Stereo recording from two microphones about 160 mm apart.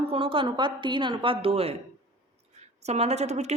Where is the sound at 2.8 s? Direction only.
45° right (ahead or behind).